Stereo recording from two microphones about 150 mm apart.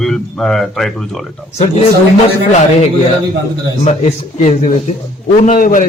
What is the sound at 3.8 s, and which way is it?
A man's voice, 45° left (ahead or behind).